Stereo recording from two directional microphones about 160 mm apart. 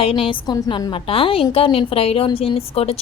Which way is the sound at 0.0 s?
35° left (ahead or behind).